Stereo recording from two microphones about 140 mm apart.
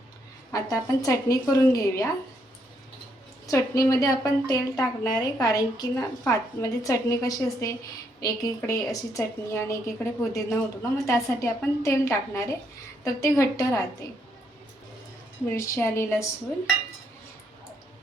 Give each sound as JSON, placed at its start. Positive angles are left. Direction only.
{"t": 0.5, "sound": "a woman's voice", "side_deg": 25}
{"t": 3.4, "sound": "a woman's voice", "side_deg": 25}
{"t": 15.4, "sound": "a woman's voice", "side_deg": 20}